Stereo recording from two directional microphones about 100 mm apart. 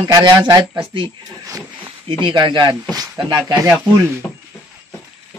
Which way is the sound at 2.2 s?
50° right (ahead or behind).